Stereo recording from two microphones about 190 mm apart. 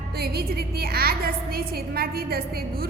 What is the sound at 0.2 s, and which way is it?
A woman's voice, 55° right (ahead or behind).